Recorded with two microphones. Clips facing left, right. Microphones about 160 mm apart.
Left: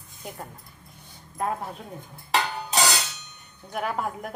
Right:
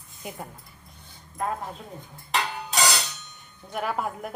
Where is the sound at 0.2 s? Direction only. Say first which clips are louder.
Right 1 dB; 5° right (ahead or behind).